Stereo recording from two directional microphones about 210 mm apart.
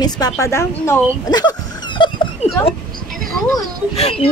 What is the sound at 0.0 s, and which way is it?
A woman's voice, 15° left (ahead or behind).